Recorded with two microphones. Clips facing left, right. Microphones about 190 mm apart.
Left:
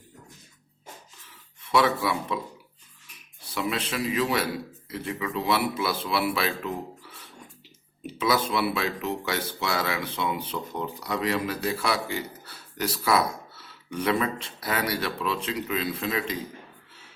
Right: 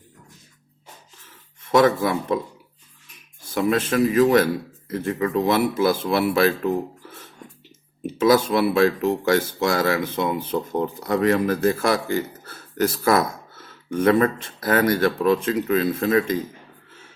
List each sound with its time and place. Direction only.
1.6 s speech: 45° right (ahead or behind)
3.5 s speech: 45° right (ahead or behind)